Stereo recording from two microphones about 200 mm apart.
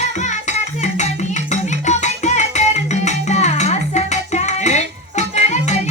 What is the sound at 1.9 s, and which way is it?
Music, 35° left (ahead or behind).